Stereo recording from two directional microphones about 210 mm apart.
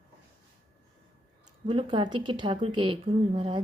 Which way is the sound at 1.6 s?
20° right (ahead or behind).